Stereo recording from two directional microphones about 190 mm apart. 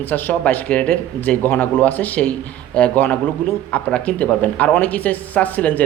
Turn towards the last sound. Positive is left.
turn(degrees=10)  # may be behind; listen again after turning